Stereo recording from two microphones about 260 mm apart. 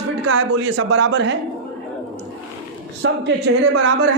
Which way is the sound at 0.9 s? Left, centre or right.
Right.